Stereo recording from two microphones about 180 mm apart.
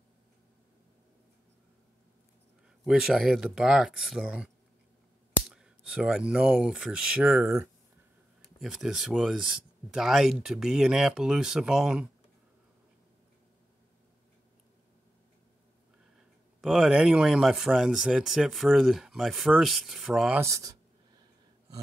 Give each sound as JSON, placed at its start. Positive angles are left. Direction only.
{"t": 2.8, "sound": "speech", "side_deg": 0}
{"t": 5.5, "sound": "speech", "side_deg": -5}
{"t": 16.6, "sound": "speech", "side_deg": -5}
{"t": 20.4, "sound": "speech", "side_deg": -15}